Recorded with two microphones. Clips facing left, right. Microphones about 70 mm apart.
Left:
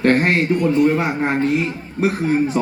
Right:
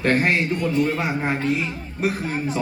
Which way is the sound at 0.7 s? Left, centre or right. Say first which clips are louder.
Left 5 dB; left.